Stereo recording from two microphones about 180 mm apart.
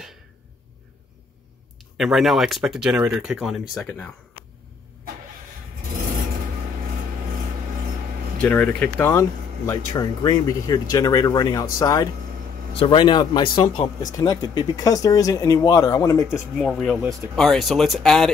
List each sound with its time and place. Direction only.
2.0 s speech: centre (ahead or behind)
8.4 s speech: 5° left (ahead or behind)
9.7 s speech: 20° left (ahead or behind)
16.5 s speech: 5° left (ahead or behind)